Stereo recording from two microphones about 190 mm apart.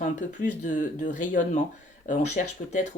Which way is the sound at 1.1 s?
45° left (ahead or behind).